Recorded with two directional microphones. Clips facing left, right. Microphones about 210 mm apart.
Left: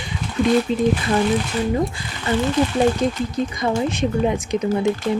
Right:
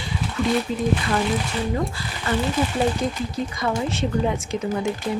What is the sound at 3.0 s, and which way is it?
Speech, 20° left (ahead or behind).